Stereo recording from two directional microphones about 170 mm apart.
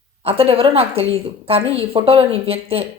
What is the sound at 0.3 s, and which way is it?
A woman's voice, 35° right (ahead or behind).